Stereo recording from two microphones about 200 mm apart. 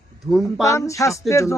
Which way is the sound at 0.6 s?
15° left (ahead or behind).